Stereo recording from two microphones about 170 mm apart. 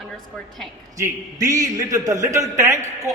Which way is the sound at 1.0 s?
20° right (ahead or behind).